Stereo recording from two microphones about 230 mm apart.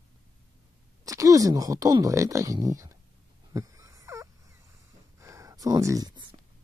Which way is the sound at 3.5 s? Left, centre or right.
Centre.